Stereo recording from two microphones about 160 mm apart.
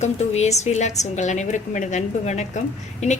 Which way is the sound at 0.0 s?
45° left (ahead or behind).